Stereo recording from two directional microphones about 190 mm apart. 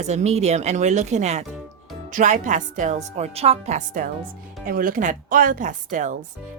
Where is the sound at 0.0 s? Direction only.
35° right (ahead or behind).